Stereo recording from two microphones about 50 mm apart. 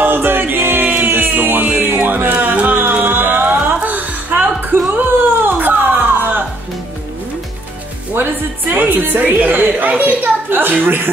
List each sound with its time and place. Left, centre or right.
0.0 s music: right
2.7 s music: right
4.4 s a sound: right
8.1 s a woman's voice: right